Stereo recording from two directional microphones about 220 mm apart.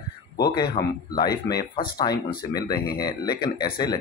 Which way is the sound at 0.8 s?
25° left (ahead or behind).